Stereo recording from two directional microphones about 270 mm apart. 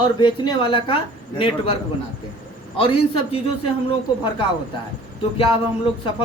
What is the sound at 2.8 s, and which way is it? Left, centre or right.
Speech, left.